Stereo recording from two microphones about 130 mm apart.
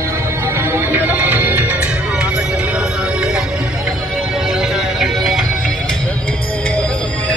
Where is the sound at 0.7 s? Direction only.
15° right (ahead or behind).